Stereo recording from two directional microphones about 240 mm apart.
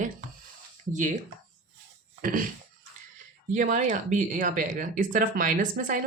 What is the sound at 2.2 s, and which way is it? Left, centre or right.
Speech, right.